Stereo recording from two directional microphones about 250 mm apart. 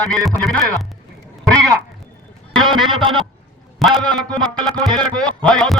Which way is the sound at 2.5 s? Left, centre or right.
Centre.